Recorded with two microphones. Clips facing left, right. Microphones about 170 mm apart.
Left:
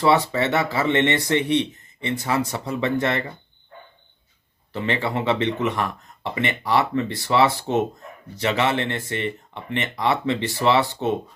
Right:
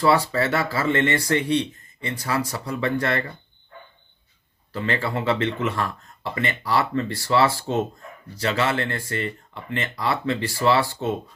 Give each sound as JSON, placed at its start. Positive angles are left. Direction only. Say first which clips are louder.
{"t": 0.0, "sound": "speech", "louder": "left 1 dB", "side_deg": 20}
{"t": 4.7, "sound": "speech", "louder": "left 1 dB", "side_deg": 20}